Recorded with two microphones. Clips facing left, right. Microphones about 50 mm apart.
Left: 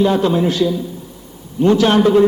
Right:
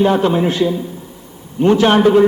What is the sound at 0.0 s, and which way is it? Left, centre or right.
A man's voice, right.